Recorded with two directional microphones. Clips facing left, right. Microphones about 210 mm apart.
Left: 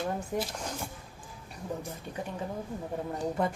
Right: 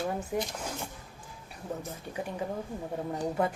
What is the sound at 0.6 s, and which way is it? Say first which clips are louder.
Speech: even; 10° right (ahead or behind).